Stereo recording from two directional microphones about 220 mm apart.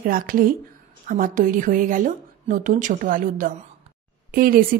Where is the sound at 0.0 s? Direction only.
40° right (ahead or behind).